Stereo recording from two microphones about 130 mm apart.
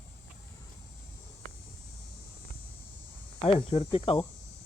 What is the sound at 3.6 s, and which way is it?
Speech, 45° left (ahead or behind).